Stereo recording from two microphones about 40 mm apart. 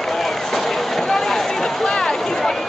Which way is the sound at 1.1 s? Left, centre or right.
Centre.